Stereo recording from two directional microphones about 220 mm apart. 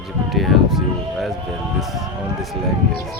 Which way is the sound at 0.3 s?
Centre (ahead or behind).